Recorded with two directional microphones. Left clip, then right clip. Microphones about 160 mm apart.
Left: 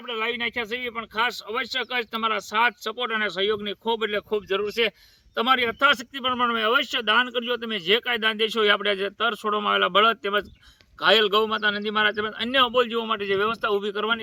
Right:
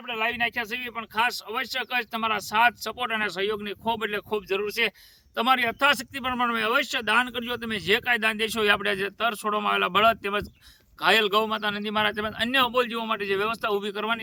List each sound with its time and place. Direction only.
0.1 s speech: 30° right (ahead or behind)